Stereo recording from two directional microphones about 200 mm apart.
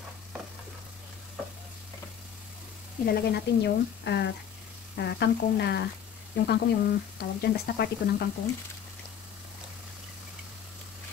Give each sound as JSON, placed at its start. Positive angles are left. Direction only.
{"t": 3.1, "sound": "speech", "side_deg": 55}